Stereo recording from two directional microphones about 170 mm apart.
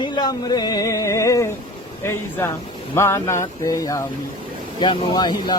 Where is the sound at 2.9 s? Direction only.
15° left (ahead or behind).